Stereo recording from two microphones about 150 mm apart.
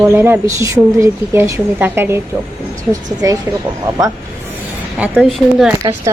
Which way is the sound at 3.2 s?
20° right (ahead or behind).